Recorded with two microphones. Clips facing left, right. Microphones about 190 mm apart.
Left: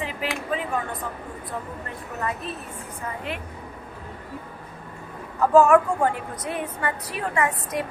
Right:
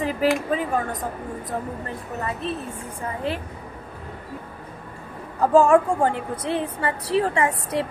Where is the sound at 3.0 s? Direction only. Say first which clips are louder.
Right 5 dB; 35° right (ahead or behind).